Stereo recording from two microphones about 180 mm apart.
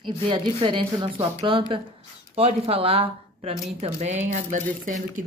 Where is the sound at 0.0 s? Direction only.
25° right (ahead or behind).